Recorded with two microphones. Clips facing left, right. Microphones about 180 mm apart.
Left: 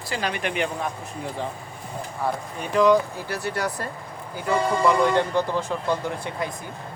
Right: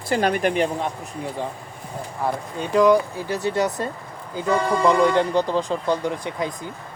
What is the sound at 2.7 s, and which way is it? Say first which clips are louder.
Speech: right 2 dB; 15° right (ahead or behind).